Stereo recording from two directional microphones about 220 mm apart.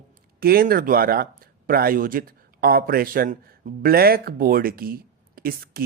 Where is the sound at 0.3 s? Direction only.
40° right (ahead or behind).